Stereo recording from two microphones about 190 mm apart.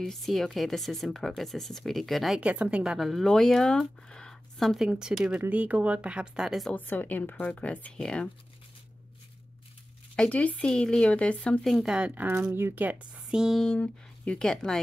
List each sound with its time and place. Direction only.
0.0 s speech: centre (ahead or behind)
6.7 s speech: 10° left (ahead or behind)
10.1 s speech: 5° left (ahead or behind)